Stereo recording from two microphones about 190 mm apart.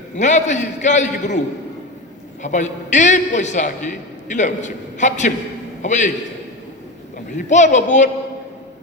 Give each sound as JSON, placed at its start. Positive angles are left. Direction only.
{"t": 0.2, "sound": "a man's voice", "side_deg": 40}
{"t": 2.4, "sound": "a man's voice", "side_deg": 40}
{"t": 7.3, "sound": "a man's voice", "side_deg": 40}